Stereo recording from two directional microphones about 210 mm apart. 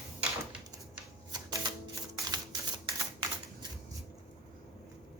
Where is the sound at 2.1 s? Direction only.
20° right (ahead or behind).